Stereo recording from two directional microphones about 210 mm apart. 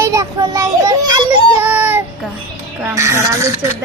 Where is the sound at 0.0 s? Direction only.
15° right (ahead or behind).